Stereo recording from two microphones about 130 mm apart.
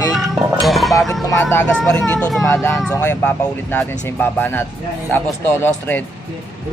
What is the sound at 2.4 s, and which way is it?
Speech, 20° left (ahead or behind).